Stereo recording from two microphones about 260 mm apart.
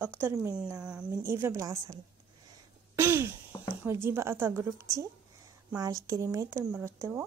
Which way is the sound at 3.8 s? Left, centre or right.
Centre.